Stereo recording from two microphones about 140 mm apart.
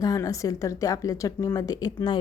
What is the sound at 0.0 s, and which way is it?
A woman's voice, 25° left (ahead or behind).